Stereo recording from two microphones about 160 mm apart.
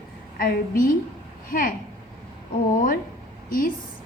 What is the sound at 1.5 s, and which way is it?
Speech, 65° left (ahead or behind).